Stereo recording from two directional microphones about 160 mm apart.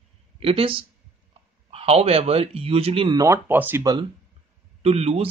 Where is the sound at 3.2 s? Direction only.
15° right (ahead or behind).